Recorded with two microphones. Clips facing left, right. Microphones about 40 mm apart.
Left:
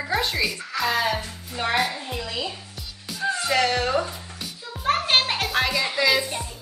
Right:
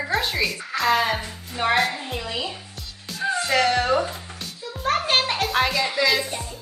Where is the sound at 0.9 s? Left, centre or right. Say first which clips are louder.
Right 2 dB; centre.